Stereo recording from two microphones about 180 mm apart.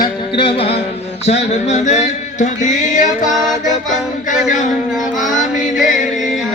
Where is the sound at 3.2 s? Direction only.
Centre (ahead or behind).